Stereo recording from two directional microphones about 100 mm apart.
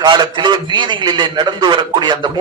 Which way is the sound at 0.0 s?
50° right (ahead or behind).